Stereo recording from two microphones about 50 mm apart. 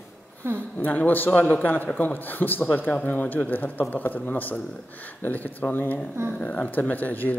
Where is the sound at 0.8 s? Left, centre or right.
Left.